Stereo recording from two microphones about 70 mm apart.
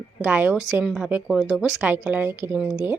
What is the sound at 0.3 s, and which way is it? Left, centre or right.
Speech, right.